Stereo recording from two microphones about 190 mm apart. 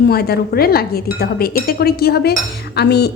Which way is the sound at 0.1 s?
55° left (ahead or behind).